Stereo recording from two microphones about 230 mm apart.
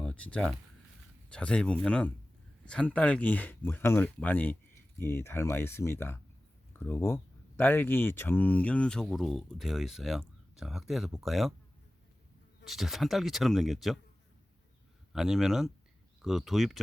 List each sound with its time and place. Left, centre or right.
0.0 s speech: centre
12.6 s speech: centre
15.1 s speech: centre